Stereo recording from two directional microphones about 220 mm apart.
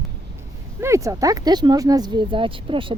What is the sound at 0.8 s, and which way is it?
Speech, 15° right (ahead or behind).